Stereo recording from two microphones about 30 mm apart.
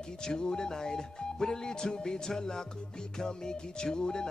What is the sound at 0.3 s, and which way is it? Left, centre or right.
Music, left.